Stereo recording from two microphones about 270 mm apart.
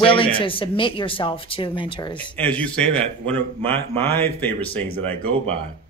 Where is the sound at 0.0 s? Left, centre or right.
Centre.